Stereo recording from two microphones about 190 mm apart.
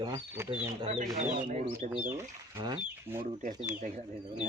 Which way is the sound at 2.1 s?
15° right (ahead or behind).